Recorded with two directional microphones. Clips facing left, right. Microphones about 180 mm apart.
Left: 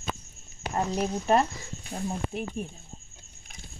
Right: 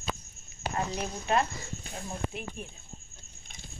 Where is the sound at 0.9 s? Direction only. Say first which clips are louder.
Left 7 dB; 40° left (ahead or behind).